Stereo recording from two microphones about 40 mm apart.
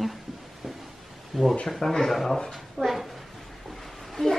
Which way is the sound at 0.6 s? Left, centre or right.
Centre.